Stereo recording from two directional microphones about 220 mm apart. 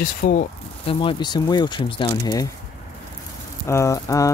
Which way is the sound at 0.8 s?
20° left (ahead or behind).